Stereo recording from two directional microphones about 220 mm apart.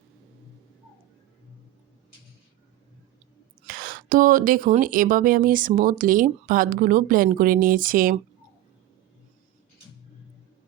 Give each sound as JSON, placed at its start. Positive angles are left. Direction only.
{"t": 3.6, "sound": "speech", "side_deg": -35}